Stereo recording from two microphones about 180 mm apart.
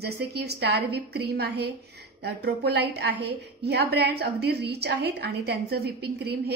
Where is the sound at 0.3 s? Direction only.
60° right (ahead or behind).